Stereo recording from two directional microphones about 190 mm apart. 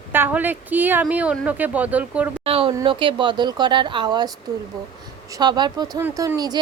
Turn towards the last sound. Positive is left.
turn(degrees=-20)  # may be behind; listen again after turning